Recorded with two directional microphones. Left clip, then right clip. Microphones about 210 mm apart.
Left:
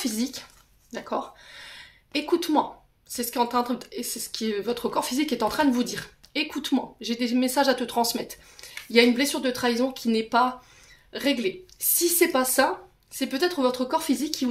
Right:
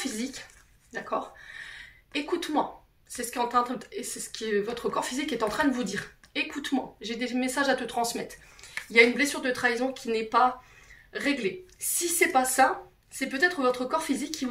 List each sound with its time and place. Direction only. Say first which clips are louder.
0.0 s speech: left 4 dB; 55° left (ahead or behind)